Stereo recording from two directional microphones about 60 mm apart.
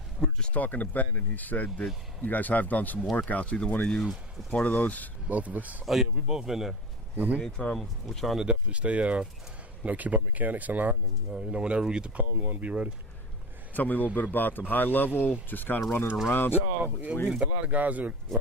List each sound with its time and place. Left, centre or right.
0.2 s a sound: centre
0.5 s speech: left
5.3 s speech: right
5.8 s speech: centre
7.4 s speech: centre
8.4 s speech: centre
11.3 s speech: centre
13.7 s speech: left
16.6 s speech: right
18.3 s speech: centre